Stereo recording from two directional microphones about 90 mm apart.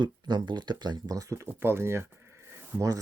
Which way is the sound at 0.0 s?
55° right (ahead or behind).